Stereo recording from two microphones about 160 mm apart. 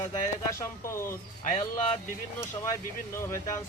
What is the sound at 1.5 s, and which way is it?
Speech, 40° left (ahead or behind).